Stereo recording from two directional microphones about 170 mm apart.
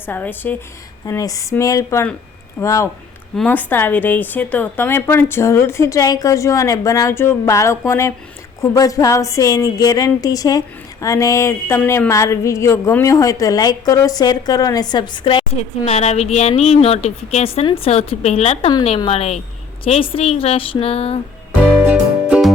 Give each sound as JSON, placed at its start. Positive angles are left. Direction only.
{"t": 0.0, "sound": "a woman's voice", "side_deg": 10}
{"t": 21.8, "sound": "music", "side_deg": -5}